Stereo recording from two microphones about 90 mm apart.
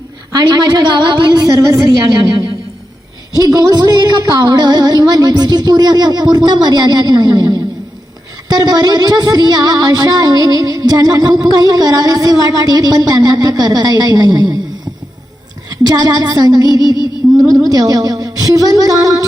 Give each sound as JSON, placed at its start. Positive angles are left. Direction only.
{"t": 0.3, "sound": "a woman's voice", "side_deg": -55}
{"t": 1.3, "sound": "a woman's voice", "side_deg": -40}
{"t": 3.3, "sound": "music", "side_deg": -45}
{"t": 15.7, "sound": "music", "side_deg": -50}